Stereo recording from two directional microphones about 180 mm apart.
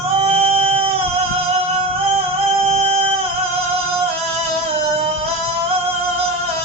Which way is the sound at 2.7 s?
30° right (ahead or behind).